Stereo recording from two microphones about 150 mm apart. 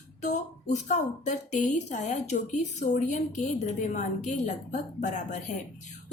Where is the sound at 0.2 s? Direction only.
50° left (ahead or behind).